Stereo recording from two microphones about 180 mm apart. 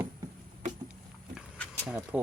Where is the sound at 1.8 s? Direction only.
5° right (ahead or behind).